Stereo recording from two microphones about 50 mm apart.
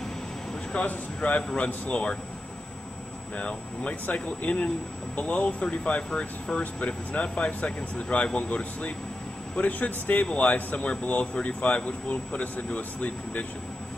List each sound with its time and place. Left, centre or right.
0.8 s speech: left
3.3 s speech: left